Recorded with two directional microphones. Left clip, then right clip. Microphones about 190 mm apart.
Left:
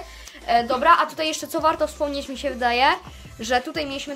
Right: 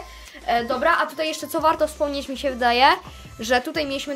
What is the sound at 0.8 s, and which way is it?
A woman's voice, 10° left (ahead or behind).